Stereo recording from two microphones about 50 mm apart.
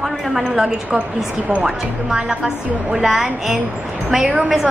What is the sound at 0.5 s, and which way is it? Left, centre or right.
A woman's voice, centre.